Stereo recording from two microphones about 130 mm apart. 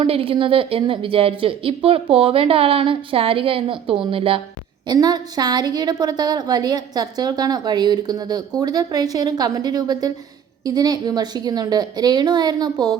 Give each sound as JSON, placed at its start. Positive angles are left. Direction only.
{"t": 0.0, "sound": "speech", "side_deg": -45}
{"t": 4.9, "sound": "a woman's voice", "side_deg": -30}